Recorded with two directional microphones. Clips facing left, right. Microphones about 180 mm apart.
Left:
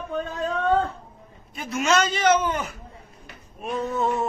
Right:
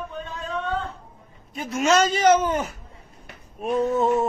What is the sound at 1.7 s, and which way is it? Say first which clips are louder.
Speech: right 2 dB; 40° right (ahead or behind).